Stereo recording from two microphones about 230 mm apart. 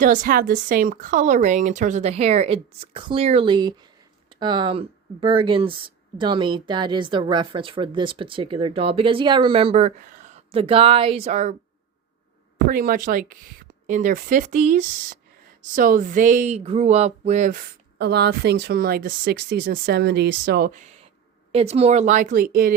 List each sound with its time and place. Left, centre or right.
0.0 s speech: right
12.6 s speech: right